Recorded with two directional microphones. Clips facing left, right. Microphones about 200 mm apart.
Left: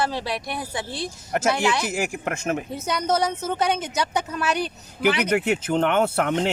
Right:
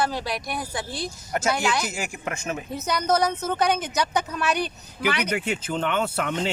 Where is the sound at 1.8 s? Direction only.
55° left (ahead or behind).